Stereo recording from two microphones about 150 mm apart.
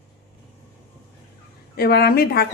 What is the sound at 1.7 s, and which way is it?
Speech, 90° left.